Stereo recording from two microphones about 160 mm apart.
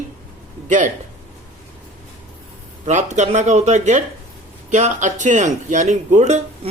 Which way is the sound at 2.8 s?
50° right (ahead or behind).